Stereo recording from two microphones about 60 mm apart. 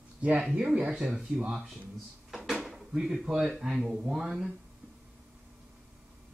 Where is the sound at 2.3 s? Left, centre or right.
Centre.